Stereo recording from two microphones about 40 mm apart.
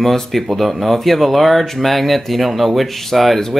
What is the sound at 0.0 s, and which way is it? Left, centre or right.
Speech, centre.